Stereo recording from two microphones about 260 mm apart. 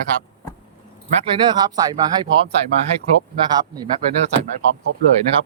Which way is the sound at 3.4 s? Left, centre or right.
Centre.